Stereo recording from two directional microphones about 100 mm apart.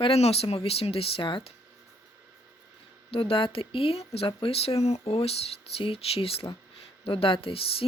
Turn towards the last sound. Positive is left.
turn(degrees=70)  # may be behind; listen again after turning